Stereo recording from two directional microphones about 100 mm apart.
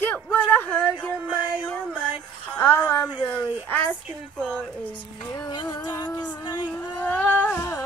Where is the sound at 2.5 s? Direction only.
20° left (ahead or behind).